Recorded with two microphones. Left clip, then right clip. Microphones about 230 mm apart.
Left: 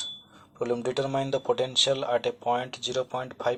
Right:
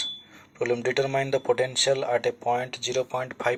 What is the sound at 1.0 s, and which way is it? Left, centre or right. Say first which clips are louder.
Speech: right 3 dB; right.